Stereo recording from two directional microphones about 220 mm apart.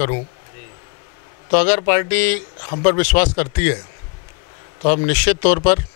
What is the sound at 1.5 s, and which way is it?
A man's voice, 15° left (ahead or behind).